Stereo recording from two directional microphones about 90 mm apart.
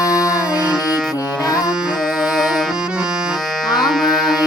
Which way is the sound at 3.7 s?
Centre (ahead or behind).